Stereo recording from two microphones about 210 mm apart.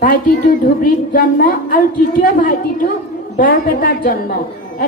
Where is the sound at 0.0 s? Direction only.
40° left (ahead or behind).